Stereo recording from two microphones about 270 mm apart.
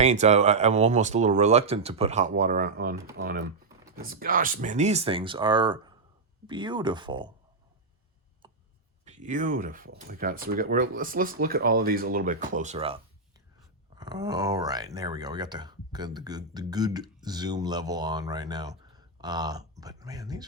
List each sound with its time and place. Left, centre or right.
0.0 s speech: right
8.4 s a sound: centre
9.0 s speech: right